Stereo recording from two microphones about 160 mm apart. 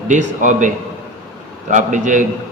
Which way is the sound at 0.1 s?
50° right (ahead or behind).